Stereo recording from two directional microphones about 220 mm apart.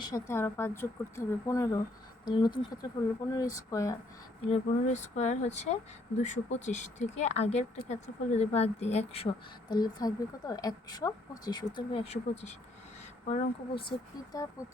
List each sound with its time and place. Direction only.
0.0 s speech: 15° left (ahead or behind)
4.5 s speech: 30° left (ahead or behind)